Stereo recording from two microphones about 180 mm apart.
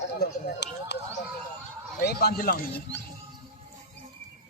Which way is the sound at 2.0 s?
60° left (ahead or behind).